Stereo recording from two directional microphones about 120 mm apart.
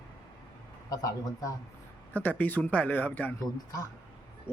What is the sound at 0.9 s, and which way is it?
Speech, 30° left (ahead or behind).